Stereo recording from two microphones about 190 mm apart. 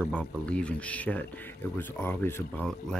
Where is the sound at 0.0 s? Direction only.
5° left (ahead or behind).